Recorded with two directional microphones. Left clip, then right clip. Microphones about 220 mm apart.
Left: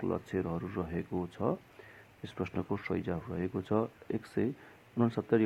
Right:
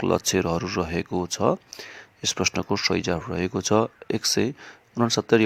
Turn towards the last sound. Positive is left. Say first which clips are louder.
# right 9 dB
turn(degrees=-35)  # may be behind; listen again after turning